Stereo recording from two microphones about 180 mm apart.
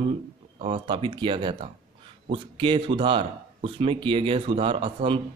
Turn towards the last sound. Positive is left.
turn(degrees=-30)  # may be behind; listen again after turning